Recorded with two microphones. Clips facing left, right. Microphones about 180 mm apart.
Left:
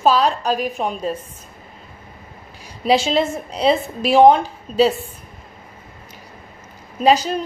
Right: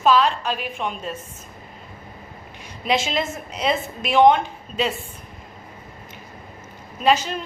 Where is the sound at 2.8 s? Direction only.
35° left (ahead or behind).